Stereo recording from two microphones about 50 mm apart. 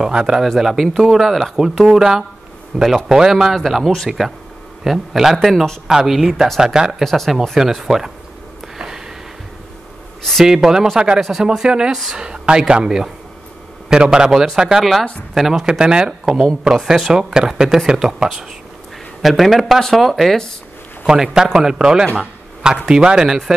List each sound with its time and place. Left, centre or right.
0.0 s speech: centre
7.0 s speech: centre
8.7 s a sound: centre
10.4 s speech: centre
11.4 s speech: centre
15.8 s speech: centre
21.0 s a man's voice: centre
22.1 s a sound: centre
22.8 s speech: centre